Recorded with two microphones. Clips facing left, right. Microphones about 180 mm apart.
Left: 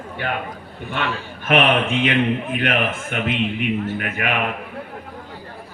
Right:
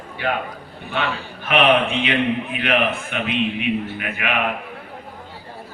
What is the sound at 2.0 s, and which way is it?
A man's voice, 45° left (ahead or behind).